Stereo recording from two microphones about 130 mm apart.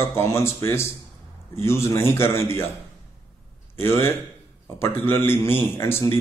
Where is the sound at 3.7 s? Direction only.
20° left (ahead or behind).